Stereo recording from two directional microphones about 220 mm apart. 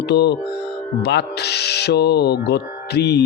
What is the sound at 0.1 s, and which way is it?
Speech, 50° left (ahead or behind).